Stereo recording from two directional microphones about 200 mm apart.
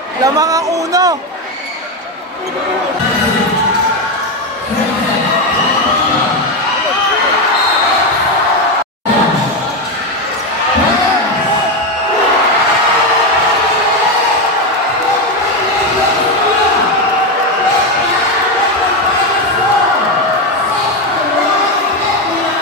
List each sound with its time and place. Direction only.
0.2 s speech: 15° right (ahead or behind)